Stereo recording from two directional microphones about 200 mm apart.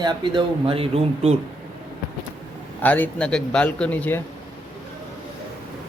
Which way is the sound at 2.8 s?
10° left (ahead or behind).